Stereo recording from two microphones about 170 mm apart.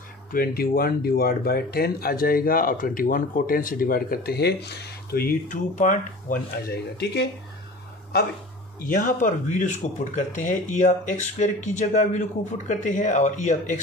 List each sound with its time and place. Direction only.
0.3 s speech: 60° left (ahead or behind)
8.8 s speech: 55° left (ahead or behind)